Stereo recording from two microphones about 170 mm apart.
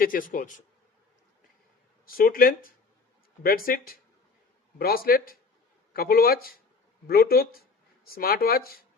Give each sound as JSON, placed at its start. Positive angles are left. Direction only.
{"t": 0.0, "sound": "speech", "side_deg": 55}
{"t": 2.0, "sound": "speech", "side_deg": 60}